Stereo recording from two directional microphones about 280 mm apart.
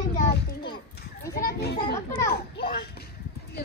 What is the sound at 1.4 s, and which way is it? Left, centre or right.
Children playing, left.